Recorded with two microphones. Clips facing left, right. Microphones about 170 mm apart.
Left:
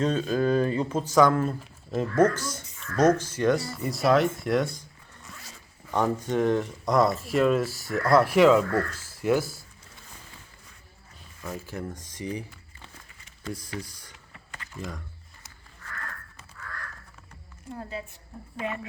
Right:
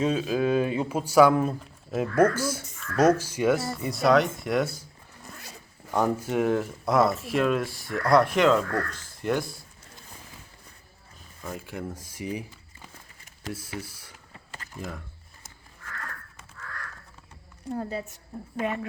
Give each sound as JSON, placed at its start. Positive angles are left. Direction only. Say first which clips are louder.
{"t": 0.0, "sound": "speech", "louder": "even", "side_deg": -5}
{"t": 5.3, "sound": "zipper", "louder": "right 2 dB", "side_deg": -60}
{"t": 5.9, "sound": "speech", "louder": "even", "side_deg": -5}
{"t": 11.4, "sound": "speech", "louder": "even", "side_deg": 0}
{"t": 13.5, "sound": "speech", "louder": "even", "side_deg": -5}
{"t": 17.7, "sound": "a woman's voice", "louder": "right 5 dB", "side_deg": -40}